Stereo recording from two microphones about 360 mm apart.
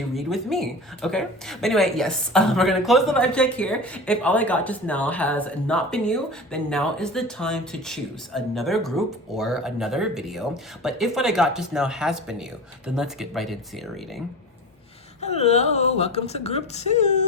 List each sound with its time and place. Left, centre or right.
0.1 s speech: centre
15.2 s speech: centre